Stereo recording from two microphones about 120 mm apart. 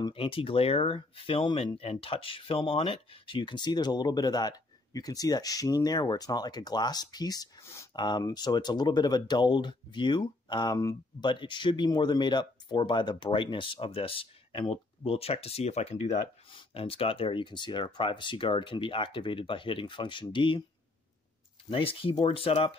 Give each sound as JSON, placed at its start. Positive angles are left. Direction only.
{"t": 0.1, "sound": "speech", "side_deg": 50}
{"t": 16.4, "sound": "speech", "side_deg": 50}
{"t": 21.6, "sound": "speech", "side_deg": 50}